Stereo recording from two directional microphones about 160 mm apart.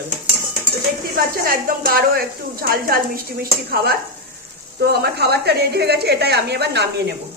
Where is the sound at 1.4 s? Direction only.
65° right (ahead or behind); by 7.1 s 90° right.